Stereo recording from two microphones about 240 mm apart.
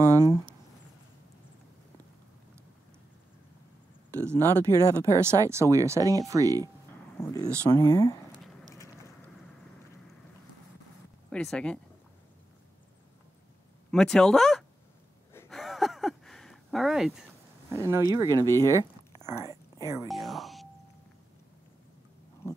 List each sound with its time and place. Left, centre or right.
0.0 s a sound: centre
4.1 s a sound: centre
4.4 s speech: centre
4.9 s speech: centre
7.7 s speech: centre
8.7 s boat: centre
11.2 s speech: centre
13.8 s speech: centre
15.3 s a sound: centre
17.6 s speech: centre
18.5 s speech: centre
20.1 s speech: centre